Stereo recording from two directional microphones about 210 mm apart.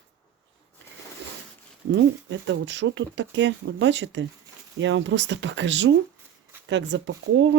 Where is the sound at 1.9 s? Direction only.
60° right (ahead or behind).